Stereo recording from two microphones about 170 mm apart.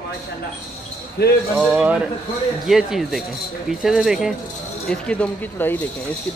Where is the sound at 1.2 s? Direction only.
70° left (ahead or behind).